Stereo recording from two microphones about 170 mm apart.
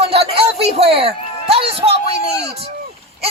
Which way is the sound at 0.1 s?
35° right (ahead or behind).